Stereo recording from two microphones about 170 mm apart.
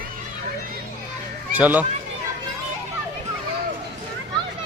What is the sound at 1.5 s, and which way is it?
Speech, 10° right (ahead or behind).